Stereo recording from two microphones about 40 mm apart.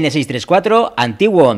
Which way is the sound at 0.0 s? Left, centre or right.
Centre.